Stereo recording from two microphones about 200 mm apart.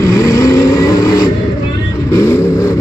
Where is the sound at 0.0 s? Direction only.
15° left (ahead or behind).